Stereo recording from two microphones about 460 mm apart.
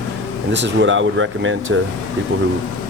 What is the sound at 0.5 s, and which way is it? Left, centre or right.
Speech, right.